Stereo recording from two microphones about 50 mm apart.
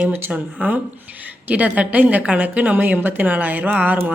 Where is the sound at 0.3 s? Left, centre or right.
Right.